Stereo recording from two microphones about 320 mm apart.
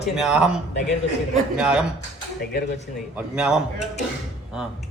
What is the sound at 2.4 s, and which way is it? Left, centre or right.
Speech, left.